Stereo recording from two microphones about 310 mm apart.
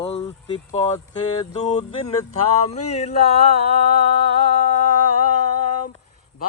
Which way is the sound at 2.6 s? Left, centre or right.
Left.